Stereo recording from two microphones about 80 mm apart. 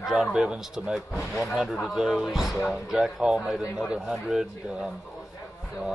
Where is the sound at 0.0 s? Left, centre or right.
Centre.